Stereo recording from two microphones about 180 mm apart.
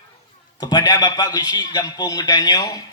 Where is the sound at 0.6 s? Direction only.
20° left (ahead or behind).